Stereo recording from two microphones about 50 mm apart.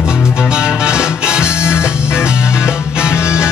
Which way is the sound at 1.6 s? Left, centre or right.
Left.